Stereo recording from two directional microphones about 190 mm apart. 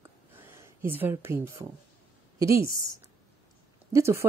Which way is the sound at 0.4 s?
10° right (ahead or behind).